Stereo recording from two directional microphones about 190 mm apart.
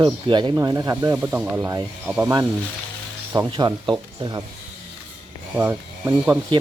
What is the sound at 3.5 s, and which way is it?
Speech, 25° right (ahead or behind).